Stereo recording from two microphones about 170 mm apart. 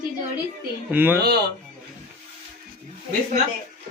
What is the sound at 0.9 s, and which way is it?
Speech, 10° right (ahead or behind).